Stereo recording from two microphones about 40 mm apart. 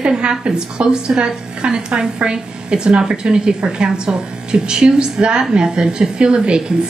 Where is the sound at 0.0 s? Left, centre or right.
Right.